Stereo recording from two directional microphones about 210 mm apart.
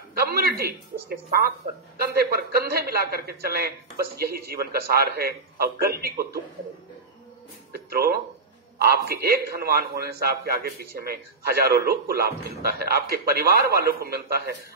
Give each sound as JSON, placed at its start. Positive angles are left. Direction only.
{"t": 0.1, "sound": "a man's voice", "side_deg": -45}
{"t": 7.7, "sound": "a man's voice", "side_deg": -45}